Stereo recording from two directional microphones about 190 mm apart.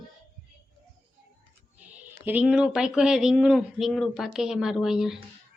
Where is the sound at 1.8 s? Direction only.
10° right (ahead or behind).